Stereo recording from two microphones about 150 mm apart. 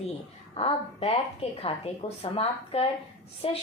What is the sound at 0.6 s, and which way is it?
A woman's voice, 40° left (ahead or behind).